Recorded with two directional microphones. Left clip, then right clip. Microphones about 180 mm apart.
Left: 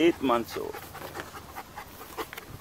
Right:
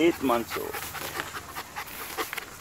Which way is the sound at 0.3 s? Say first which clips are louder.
Right 1 dB; 20° left (ahead or behind).